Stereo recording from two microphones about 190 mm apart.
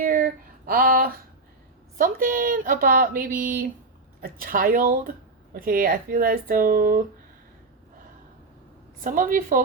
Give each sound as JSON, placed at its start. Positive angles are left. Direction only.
{"t": 0.0, "sound": "a sound", "side_deg": -50}
{"t": 2.0, "sound": "speech", "side_deg": -45}
{"t": 9.0, "sound": "speech", "side_deg": -45}